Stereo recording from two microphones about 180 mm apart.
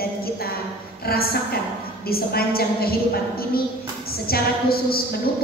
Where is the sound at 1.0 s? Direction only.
55° left (ahead or behind).